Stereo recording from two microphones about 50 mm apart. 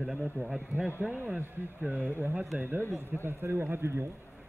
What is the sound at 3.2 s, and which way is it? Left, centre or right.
Speech, right.